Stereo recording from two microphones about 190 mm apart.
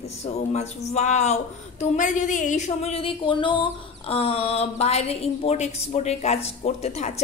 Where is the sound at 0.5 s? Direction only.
35° left (ahead or behind).